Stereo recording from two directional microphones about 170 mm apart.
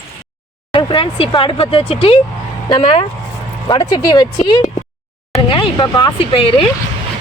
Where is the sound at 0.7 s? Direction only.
30° left (ahead or behind).